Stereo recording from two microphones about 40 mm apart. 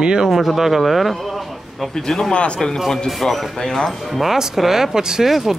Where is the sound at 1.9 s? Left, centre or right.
Centre.